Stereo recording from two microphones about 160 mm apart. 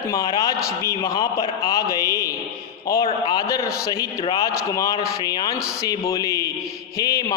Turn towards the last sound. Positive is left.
turn(degrees=20)  # may be behind; listen again after turning